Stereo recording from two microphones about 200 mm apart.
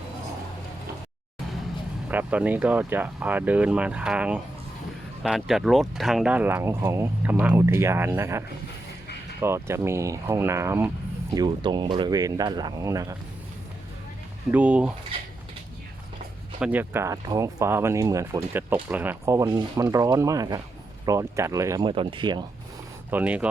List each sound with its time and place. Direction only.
2.0 s speech: 10° right (ahead or behind)
11.3 s speech: 20° right (ahead or behind)
14.5 s speech: 5° right (ahead or behind)
16.6 s speech: 5° right (ahead or behind); by 22.4 s 25° right (ahead or behind)
23.1 s speech: 5° right (ahead or behind)